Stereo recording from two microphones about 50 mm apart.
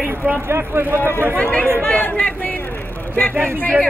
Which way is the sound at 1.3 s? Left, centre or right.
Left.